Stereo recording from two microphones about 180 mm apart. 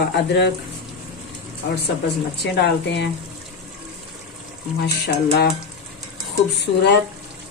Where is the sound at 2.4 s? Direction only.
65° left (ahead or behind).